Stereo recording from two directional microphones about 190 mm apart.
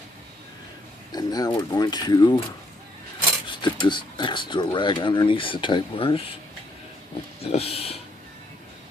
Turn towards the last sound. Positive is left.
turn(degrees=30)  # may be behind; listen again after turning